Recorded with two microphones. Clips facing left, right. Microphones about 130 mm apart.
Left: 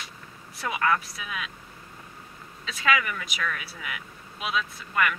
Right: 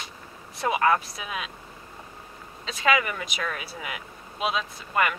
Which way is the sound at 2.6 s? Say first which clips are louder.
Right 2 dB; 30° right (ahead or behind).